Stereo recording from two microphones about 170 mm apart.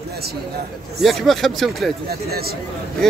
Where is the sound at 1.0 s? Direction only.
Centre (ahead or behind).